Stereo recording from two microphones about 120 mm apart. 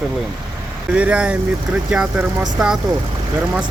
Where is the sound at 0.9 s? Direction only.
10° right (ahead or behind).